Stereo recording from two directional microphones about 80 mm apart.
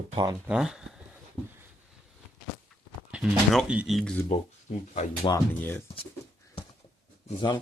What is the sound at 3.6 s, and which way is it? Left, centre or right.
Speech, centre.